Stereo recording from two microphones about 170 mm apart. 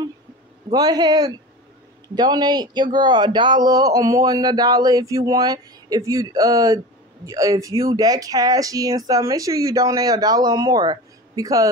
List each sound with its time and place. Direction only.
0.7 s speech: 25° right (ahead or behind)